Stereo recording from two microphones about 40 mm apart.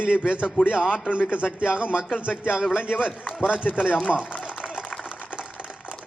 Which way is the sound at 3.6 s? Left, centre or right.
Left.